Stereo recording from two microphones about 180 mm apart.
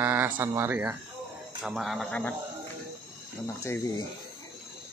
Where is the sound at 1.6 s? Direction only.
Centre (ahead or behind).